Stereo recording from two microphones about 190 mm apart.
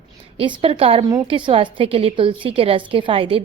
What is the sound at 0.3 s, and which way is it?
A woman's voice, 25° right (ahead or behind).